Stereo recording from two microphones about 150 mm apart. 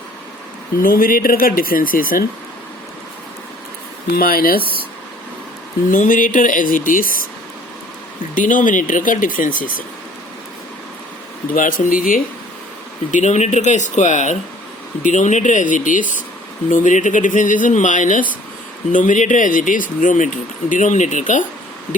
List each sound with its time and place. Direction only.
0.8 s speech: 70° left (ahead or behind)
4.1 s speech: 80° left
5.9 s speech: 60° left (ahead or behind)
8.4 s speech: 60° left (ahead or behind)
11.5 s speech: 60° left (ahead or behind)
13.1 s speech: 55° left (ahead or behind)